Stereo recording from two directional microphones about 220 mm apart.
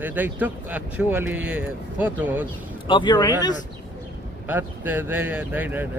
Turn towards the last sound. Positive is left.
turn(degrees=-10)  # may be behind; listen again after turning